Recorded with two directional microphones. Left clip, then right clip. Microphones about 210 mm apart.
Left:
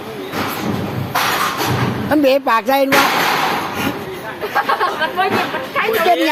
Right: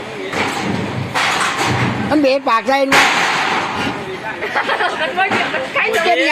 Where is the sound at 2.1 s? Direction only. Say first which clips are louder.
Left 1 dB; 20° left (ahead or behind).